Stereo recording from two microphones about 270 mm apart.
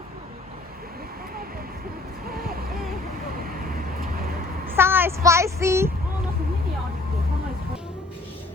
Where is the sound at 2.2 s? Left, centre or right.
Right.